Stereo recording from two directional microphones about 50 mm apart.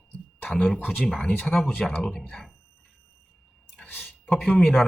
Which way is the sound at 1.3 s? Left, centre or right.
Left.